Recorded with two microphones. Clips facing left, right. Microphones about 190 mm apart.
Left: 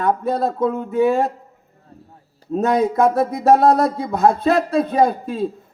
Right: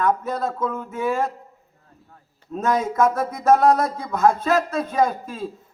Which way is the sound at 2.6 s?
35° left (ahead or behind).